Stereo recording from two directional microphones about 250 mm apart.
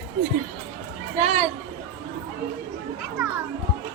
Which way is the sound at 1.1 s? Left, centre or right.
Right.